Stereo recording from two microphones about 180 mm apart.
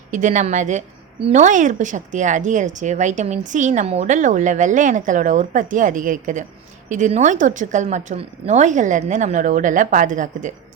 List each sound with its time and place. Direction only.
0.1 s a woman's voice: 45° right (ahead or behind)